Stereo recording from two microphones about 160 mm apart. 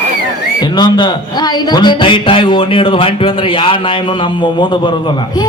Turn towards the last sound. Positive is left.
turn(degrees=30)  # may be behind; listen again after turning